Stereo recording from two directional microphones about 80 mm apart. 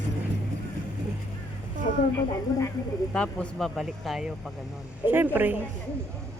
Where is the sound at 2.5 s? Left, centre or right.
Left.